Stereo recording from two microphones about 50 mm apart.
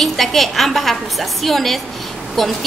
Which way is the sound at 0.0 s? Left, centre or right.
Centre.